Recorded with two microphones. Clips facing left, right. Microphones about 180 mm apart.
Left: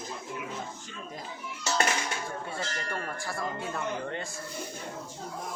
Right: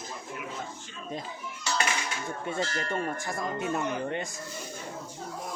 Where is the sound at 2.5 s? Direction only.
20° right (ahead or behind).